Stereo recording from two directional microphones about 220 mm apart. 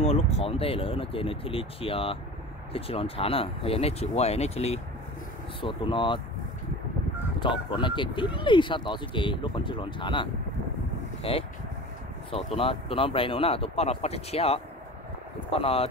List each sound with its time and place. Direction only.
0.0 s speech: 30° left (ahead or behind)
7.3 s speech: 20° left (ahead or behind)
11.2 s speech: 25° left (ahead or behind)
12.4 s speech: 25° left (ahead or behind)